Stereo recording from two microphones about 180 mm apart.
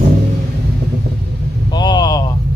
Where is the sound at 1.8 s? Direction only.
25° left (ahead or behind).